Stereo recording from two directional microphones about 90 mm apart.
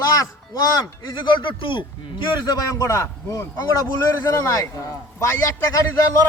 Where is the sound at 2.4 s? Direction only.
45° left (ahead or behind).